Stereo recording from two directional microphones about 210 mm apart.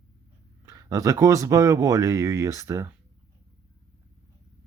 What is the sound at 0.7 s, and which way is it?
Speech, 15° right (ahead or behind).